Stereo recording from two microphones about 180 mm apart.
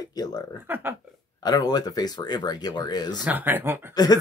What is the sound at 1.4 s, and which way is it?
Speech, 20° left (ahead or behind).